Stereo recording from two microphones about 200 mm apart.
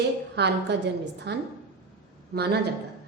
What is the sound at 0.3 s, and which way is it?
A woman's voice, 55° right (ahead or behind).